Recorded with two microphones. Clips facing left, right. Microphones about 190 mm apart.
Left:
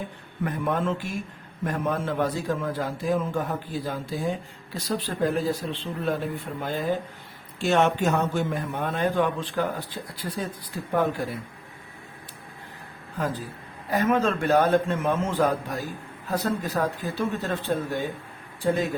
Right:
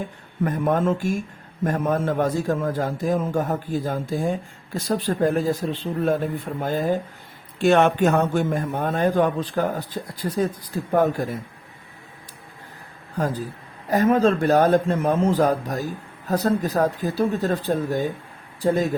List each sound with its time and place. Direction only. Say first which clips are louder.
0.4 s a man's voice: right 5 dB; 45° right (ahead or behind)
7.6 s a man's voice: right 5 dB; 55° right (ahead or behind)
13.1 s a man's voice: right 4 dB; 40° right (ahead or behind)